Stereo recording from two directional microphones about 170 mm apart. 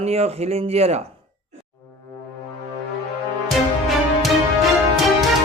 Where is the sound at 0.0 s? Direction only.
40° right (ahead or behind).